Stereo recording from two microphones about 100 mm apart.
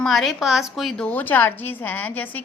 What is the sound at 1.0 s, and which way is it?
A woman's voice, 15° left (ahead or behind).